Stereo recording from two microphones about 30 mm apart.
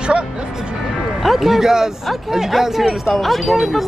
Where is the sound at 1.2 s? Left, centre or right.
Centre.